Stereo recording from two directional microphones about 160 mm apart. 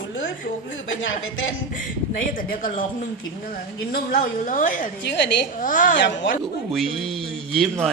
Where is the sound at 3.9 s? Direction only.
65° left (ahead or behind).